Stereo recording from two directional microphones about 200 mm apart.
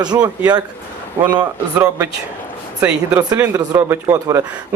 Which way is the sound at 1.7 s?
10° right (ahead or behind).